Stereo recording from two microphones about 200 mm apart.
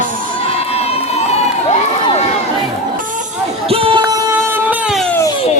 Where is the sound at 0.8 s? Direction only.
30° left (ahead or behind).